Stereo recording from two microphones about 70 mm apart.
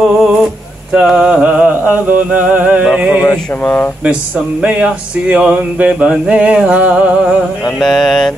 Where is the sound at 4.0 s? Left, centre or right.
Centre.